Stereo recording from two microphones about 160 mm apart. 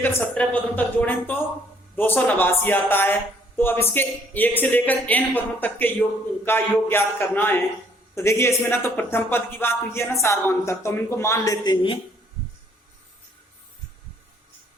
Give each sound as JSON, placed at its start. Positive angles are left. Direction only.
{"t": 0.0, "sound": "speech", "side_deg": 10}